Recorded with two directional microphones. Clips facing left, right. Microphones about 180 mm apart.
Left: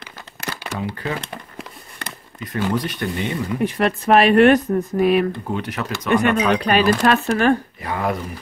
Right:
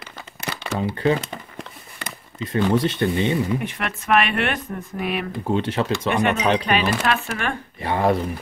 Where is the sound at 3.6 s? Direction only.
35° left (ahead or behind).